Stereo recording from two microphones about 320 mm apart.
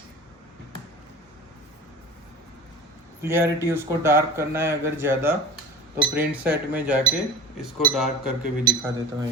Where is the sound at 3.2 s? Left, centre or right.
Centre.